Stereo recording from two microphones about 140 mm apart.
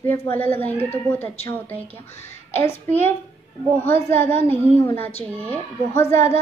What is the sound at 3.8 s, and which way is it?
A child's voice, 15° left (ahead or behind).